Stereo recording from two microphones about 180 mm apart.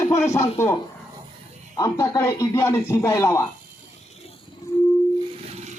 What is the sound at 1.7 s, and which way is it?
Speech, 20° left (ahead or behind).